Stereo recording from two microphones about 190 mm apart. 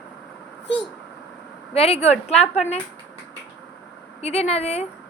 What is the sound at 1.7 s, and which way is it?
Speech, 30° left (ahead or behind).